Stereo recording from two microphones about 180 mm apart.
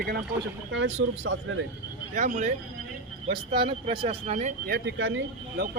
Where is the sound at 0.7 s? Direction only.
90° right.